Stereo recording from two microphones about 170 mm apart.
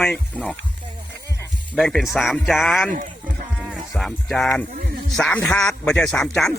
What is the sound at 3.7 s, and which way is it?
Music, centre (ahead or behind).